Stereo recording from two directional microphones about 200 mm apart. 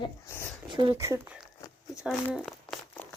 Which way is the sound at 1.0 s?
15° right (ahead or behind).